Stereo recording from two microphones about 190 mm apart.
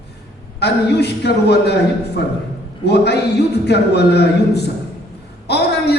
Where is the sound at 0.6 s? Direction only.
60° left (ahead or behind).